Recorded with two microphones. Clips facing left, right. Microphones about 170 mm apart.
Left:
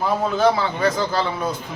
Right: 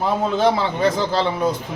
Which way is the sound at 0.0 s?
25° right (ahead or behind).